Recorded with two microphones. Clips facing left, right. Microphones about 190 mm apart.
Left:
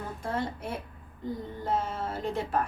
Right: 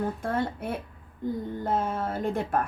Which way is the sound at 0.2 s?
55° right (ahead or behind).